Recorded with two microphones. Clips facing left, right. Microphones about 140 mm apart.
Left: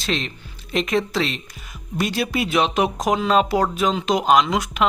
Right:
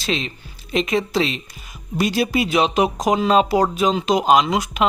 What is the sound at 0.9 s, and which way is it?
Speech, centre (ahead or behind).